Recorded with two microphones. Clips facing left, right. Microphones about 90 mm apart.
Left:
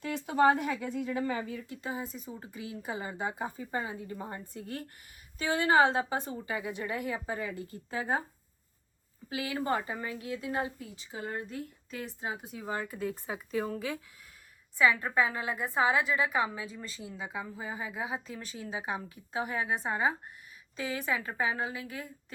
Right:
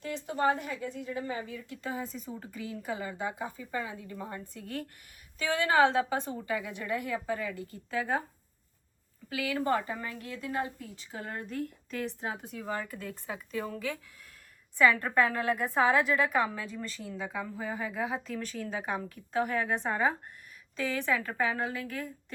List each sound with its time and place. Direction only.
0.3 s a woman's voice: 65° left (ahead or behind)
1.8 s a woman's voice: 15° left (ahead or behind); by 3.9 s 40° left (ahead or behind)
4.0 s a woman's voice: 25° left (ahead or behind)
5.6 s a woman's voice: 15° left (ahead or behind)
9.5 s a woman's voice: 15° left (ahead or behind)